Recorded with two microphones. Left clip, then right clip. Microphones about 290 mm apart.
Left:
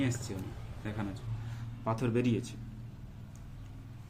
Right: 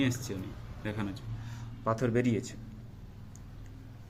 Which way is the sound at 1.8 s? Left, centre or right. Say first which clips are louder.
Right 3 dB; centre.